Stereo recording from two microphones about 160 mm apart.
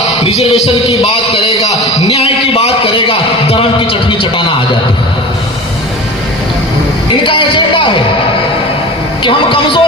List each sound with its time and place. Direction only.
0.2 s heart murmur: 40° left (ahead or behind)
0.6 s a man's voice: 35° left (ahead or behind)
7.3 s a sound: 30° left (ahead or behind)
9.2 s a man's voice: 30° left (ahead or behind)